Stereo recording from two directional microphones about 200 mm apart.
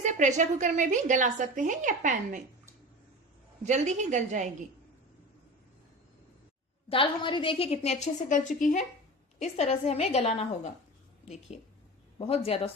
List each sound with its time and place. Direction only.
0.0 s a woman's voice: 35° right (ahead or behind)
3.6 s a woman's voice: 35° right (ahead or behind)
6.8 s a woman's voice: 25° left (ahead or behind)
12.2 s a woman's voice: 30° left (ahead or behind)